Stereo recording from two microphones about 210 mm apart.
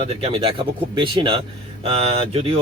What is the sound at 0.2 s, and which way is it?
Speech, 25° right (ahead or behind).